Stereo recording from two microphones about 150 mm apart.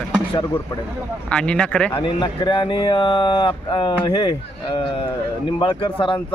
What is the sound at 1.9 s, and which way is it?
Speech, 35° left (ahead or behind).